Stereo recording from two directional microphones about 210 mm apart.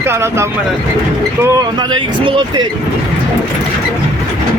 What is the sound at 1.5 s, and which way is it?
Speech, 20° right (ahead or behind).